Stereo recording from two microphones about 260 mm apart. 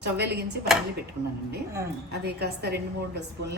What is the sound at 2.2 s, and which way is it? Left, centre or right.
Speech, right.